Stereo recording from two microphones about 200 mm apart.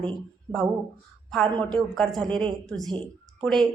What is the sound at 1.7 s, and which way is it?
Speech, 5° left (ahead or behind).